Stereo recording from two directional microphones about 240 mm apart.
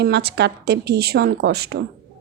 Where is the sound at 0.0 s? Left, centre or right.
Right.